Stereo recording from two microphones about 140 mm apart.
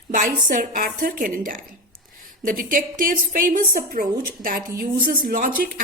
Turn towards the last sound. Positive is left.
turn(degrees=-90)